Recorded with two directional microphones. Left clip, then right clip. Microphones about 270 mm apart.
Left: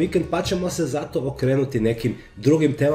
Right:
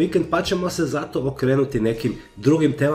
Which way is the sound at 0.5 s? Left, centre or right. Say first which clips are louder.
Right 1 dB; centre.